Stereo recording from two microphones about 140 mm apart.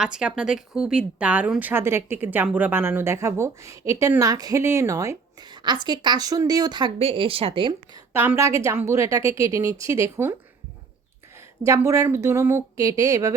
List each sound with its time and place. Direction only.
0.0 s a woman's voice: 5° right (ahead or behind); by 7.7 s 40° right (ahead or behind)
8.1 s a woman's voice: 15° right (ahead or behind)
11.6 s a woman's voice: 20° right (ahead or behind)